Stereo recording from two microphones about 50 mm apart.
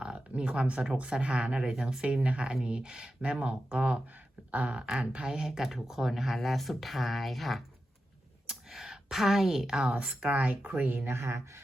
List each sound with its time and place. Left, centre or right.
0.0 s speech: right
5.5 s speech: centre
8.4 s a sound: centre
10.2 s speech: right
11.0 s speech: right